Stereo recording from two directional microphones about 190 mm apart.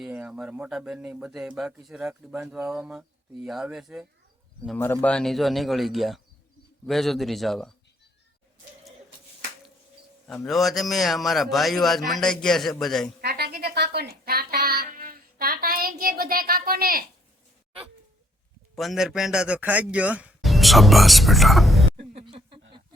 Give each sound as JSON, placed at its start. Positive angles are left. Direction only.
{"t": 0.0, "sound": "speech", "side_deg": -5}
{"t": 4.8, "sound": "speech", "side_deg": 10}
{"t": 10.2, "sound": "speech", "side_deg": 0}
{"t": 13.2, "sound": "music", "side_deg": -55}
{"t": 18.8, "sound": "speech", "side_deg": 0}
{"t": 21.9, "sound": "music", "side_deg": -30}